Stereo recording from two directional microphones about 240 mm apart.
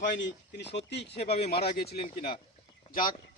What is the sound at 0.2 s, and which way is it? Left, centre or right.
Speech, left.